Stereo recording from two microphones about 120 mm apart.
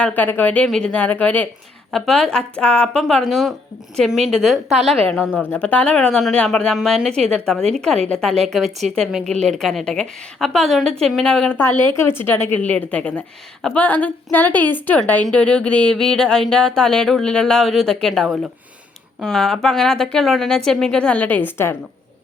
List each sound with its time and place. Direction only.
0.2 s a woman's voice: 15° left (ahead or behind)
1.9 s a woman's voice: 5° left (ahead or behind)
5.3 s a woman's voice: 10° left (ahead or behind)